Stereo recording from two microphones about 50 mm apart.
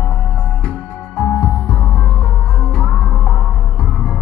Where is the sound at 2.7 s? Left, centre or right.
Centre.